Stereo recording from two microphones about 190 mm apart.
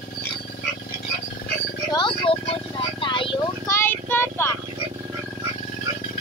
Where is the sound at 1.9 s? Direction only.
25° left (ahead or behind).